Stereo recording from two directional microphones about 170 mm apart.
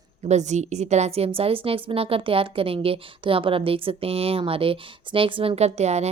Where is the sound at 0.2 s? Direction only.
40° right (ahead or behind).